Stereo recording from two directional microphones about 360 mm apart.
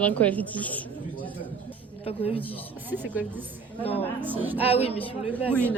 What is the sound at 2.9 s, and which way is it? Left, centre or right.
A woman's voice, centre.